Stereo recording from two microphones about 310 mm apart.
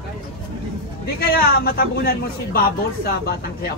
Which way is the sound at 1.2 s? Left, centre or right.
Left.